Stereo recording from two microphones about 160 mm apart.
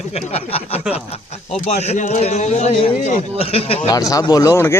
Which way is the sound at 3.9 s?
20° left (ahead or behind).